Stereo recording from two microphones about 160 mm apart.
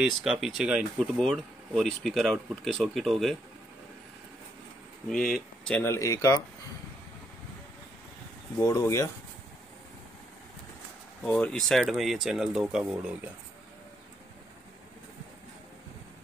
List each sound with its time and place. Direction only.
0.0 s speech: 5° right (ahead or behind)
5.1 s speech: centre (ahead or behind); by 6.4 s 20° left (ahead or behind)
8.5 s speech: 20° left (ahead or behind)
11.2 s speech: 10° left (ahead or behind)